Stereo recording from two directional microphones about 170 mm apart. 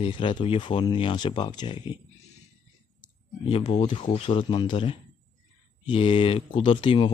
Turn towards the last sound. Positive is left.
turn(degrees=30)  # may be behind; listen again after turning